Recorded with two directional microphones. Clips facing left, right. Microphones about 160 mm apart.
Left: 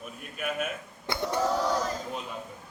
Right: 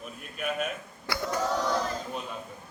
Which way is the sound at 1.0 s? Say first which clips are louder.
Left 1 dB; 25° left (ahead or behind).